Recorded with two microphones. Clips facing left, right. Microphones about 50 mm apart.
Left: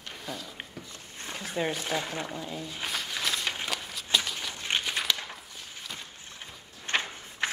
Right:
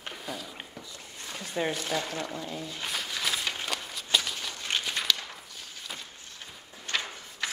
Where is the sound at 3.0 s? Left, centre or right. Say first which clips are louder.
Even; centre.